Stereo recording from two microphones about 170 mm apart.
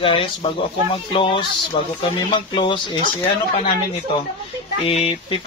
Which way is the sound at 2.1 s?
30° left (ahead or behind).